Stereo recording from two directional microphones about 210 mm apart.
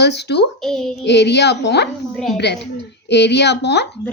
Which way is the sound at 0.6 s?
Centre (ahead or behind).